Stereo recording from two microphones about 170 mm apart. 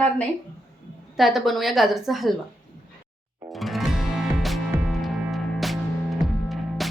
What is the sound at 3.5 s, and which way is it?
Music, centre (ahead or behind).